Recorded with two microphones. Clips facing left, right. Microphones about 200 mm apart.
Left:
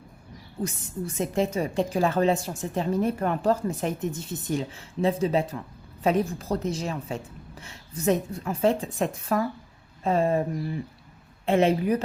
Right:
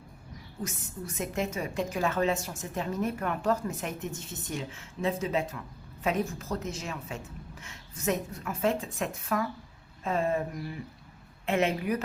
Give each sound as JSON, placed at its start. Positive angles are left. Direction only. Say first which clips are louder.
{"t": 0.6, "sound": "a woman's voice", "louder": "left 7 dB", "side_deg": 30}